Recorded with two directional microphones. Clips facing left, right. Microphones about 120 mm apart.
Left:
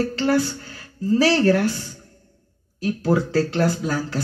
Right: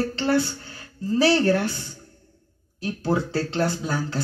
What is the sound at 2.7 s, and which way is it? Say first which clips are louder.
Speech: left 4 dB; 25° right (ahead or behind).